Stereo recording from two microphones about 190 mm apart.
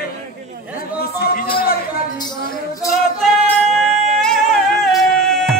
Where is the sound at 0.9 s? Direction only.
55° left (ahead or behind).